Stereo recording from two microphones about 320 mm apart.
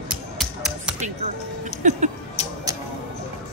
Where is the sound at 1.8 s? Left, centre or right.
Right.